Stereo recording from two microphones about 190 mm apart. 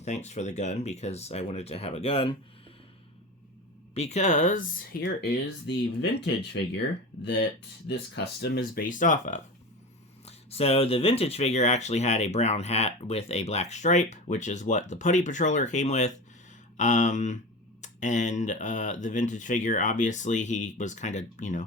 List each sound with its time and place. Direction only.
0.0 s speech: 35° left (ahead or behind)
3.9 s speech: 35° left (ahead or behind)
4.9 s speech: 65° left (ahead or behind)
7.9 s speech: 60° left (ahead or behind); by 21.6 s 40° left (ahead or behind)